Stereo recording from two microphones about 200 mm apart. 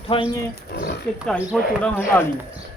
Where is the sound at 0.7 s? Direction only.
45° left (ahead or behind).